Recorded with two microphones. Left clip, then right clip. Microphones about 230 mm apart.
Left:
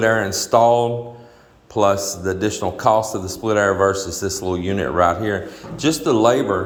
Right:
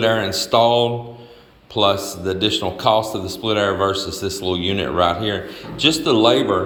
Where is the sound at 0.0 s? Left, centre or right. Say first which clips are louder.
Even; centre.